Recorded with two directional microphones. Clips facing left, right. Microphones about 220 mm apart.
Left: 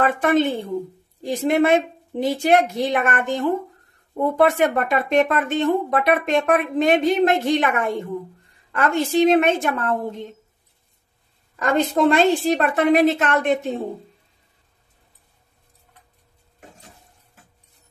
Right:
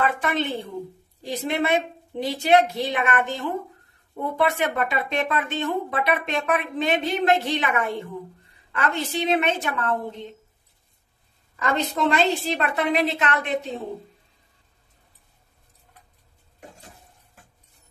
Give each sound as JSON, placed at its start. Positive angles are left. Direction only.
{"t": 0.0, "sound": "a woman's voice", "side_deg": 50}
{"t": 11.5, "sound": "a woman's voice", "side_deg": 50}